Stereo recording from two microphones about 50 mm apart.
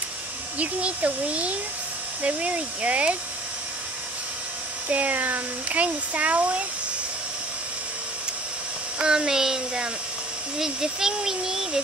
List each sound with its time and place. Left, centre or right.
0.6 s speech: right
4.8 s speech: right
9.0 s speech: centre